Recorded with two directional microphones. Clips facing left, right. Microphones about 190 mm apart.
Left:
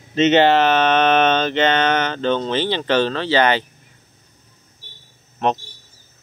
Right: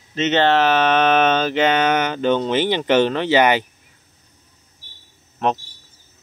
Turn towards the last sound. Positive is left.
turn(degrees=0)  # may be behind; listen again after turning